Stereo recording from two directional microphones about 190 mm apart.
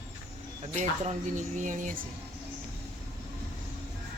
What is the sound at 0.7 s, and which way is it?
Speech, 40° right (ahead or behind).